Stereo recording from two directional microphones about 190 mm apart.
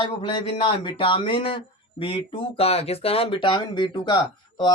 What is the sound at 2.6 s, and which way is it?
A man's voice, 30° left (ahead or behind).